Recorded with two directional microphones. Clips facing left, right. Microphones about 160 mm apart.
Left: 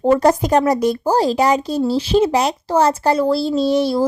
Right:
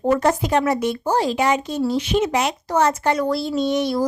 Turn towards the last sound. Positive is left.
turn(degrees=30)  # may be behind; listen again after turning